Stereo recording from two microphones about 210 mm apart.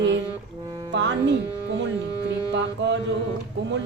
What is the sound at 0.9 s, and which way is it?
Music, 60° right (ahead or behind).